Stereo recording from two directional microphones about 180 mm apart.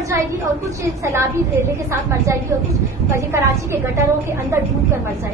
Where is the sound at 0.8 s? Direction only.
15° right (ahead or behind).